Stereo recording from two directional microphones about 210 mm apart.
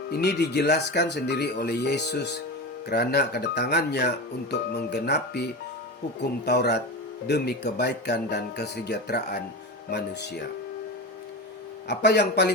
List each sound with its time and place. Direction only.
0.1 s speech: 50° left (ahead or behind)
11.9 s speech: 55° left (ahead or behind)